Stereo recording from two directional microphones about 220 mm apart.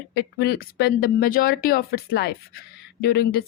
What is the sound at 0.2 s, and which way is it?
Speech, 45° left (ahead or behind).